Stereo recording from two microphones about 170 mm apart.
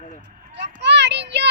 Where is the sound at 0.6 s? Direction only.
90° right.